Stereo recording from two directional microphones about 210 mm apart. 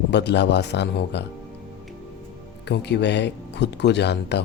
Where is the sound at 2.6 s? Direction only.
55° left (ahead or behind).